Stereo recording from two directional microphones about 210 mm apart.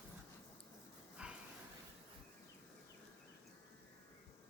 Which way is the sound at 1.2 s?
5° right (ahead or behind).